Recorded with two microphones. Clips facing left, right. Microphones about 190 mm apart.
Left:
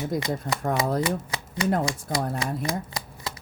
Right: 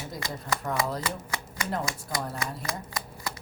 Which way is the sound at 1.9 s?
30° left (ahead or behind).